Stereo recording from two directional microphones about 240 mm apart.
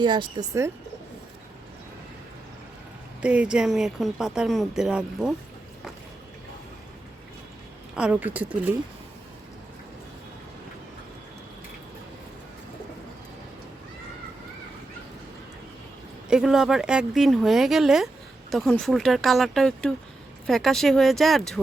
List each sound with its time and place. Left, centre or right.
0.0 s speech: centre
3.2 s a woman's voice: centre
7.9 s speech: centre
16.3 s a woman's voice: centre